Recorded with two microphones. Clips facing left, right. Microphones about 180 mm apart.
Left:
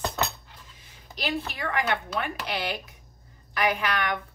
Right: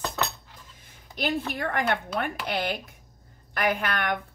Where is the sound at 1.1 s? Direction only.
50° right (ahead or behind).